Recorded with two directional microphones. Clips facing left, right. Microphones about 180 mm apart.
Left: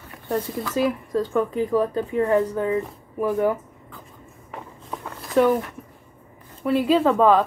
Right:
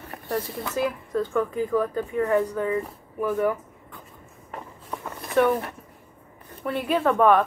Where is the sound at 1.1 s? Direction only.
25° left (ahead or behind).